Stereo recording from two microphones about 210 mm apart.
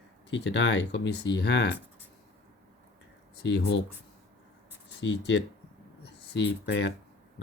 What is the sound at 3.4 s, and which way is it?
Speech, 55° left (ahead or behind).